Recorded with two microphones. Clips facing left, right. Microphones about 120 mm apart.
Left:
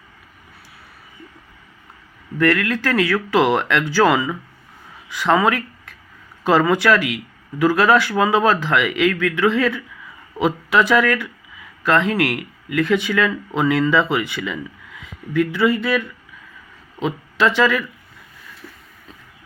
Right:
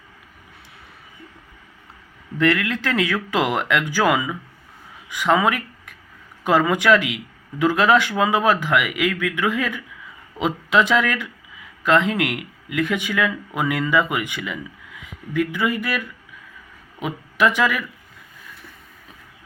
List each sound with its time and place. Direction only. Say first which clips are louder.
2.4 s speech: left 2 dB; 20° right (ahead or behind)